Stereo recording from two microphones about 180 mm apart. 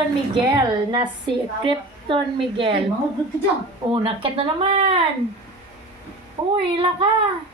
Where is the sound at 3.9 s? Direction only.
30° right (ahead or behind).